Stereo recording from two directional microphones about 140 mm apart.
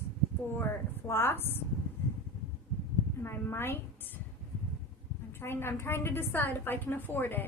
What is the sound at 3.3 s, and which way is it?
Speech, 15° left (ahead or behind).